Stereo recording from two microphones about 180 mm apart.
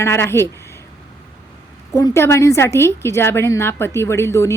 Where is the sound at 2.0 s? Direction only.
15° left (ahead or behind).